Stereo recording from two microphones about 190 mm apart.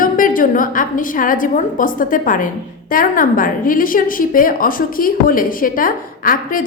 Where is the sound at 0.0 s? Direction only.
45° left (ahead or behind).